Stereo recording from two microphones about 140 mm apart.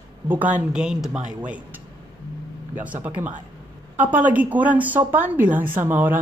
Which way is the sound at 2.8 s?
10° right (ahead or behind).